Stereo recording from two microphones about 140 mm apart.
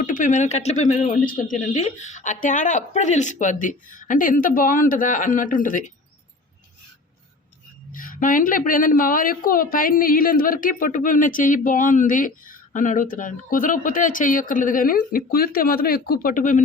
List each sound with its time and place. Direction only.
0.0 s a woman's voice: 70° left (ahead or behind)
7.9 s a woman's voice: 75° left (ahead or behind)